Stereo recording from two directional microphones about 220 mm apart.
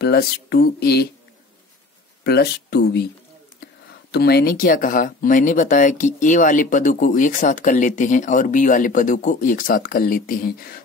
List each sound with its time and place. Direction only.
0.0 s speech: 45° left (ahead or behind)
2.2 s speech: 45° left (ahead or behind)
4.1 s speech: 45° left (ahead or behind)